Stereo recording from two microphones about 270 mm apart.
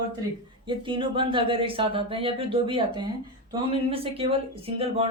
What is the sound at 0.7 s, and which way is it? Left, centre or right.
Speech, centre.